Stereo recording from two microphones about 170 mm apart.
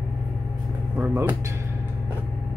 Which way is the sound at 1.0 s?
15° right (ahead or behind).